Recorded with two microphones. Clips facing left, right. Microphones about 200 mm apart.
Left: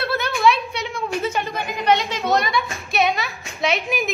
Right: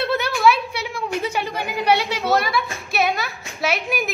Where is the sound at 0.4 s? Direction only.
5° right (ahead or behind).